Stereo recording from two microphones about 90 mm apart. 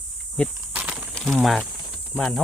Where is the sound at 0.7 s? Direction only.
15° right (ahead or behind).